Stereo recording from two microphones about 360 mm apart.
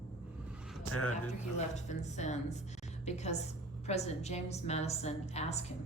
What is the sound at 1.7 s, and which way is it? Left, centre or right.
A woman's voice, centre.